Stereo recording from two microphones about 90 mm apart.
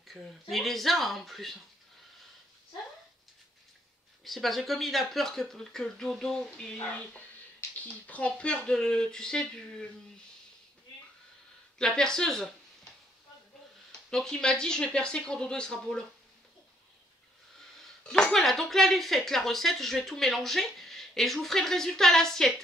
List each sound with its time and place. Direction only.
0.0 s speech: centre (ahead or behind)
4.2 s speech: centre (ahead or behind)
11.8 s speech: 5° left (ahead or behind)
14.1 s speech: 5° left (ahead or behind)
17.7 s speech: 5° left (ahead or behind)